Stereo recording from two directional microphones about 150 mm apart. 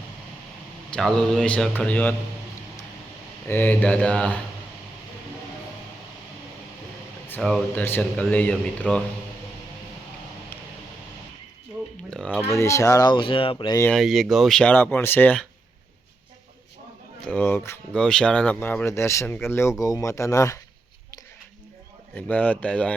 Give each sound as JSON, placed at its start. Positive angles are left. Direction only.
{"t": 0.9, "sound": "speech", "side_deg": 5}
{"t": 3.4, "sound": "speech", "side_deg": 10}
{"t": 7.3, "sound": "speech", "side_deg": 5}
{"t": 12.1, "sound": "a sound", "side_deg": 5}
{"t": 12.5, "sound": "speech", "side_deg": 20}
{"t": 13.9, "sound": "speech", "side_deg": 0}
{"t": 17.2, "sound": "speech", "side_deg": 10}
{"t": 17.9, "sound": "speech", "side_deg": 5}
{"t": 22.1, "sound": "speech", "side_deg": 10}